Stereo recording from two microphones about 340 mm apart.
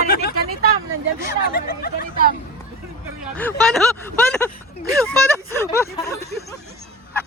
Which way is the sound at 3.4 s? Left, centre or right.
Centre.